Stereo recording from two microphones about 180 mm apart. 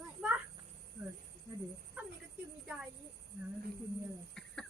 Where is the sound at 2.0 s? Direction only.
5° right (ahead or behind).